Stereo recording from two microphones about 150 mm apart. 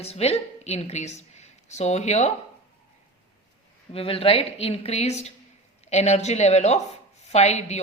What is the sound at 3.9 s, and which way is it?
A woman's voice, 40° left (ahead or behind).